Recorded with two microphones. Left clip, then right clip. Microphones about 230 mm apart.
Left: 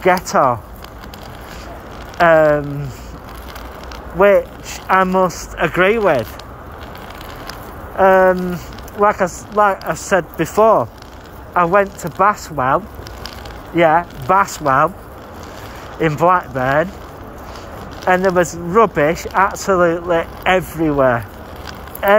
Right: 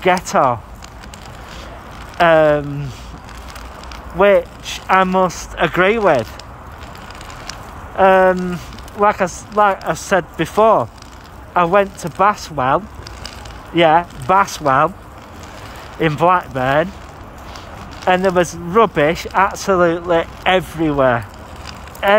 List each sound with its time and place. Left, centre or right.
0.0 s speech: right
2.1 s speech: right
4.2 s speech: right
7.9 s speech: right
16.0 s speech: right
18.0 s speech: right